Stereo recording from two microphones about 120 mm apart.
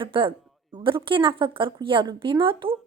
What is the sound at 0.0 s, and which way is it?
A woman's voice, 45° right (ahead or behind).